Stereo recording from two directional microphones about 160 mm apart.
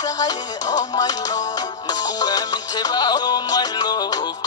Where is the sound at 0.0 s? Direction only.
20° left (ahead or behind).